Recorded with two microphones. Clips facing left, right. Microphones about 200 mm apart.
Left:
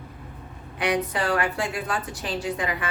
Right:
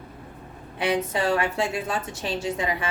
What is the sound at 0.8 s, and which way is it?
A woman's voice, 25° right (ahead or behind).